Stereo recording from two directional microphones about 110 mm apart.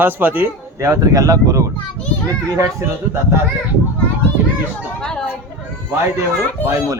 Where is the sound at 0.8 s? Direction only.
30° right (ahead or behind).